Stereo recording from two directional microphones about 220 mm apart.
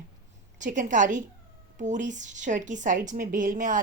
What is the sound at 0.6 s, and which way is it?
A woman's voice, 35° right (ahead or behind).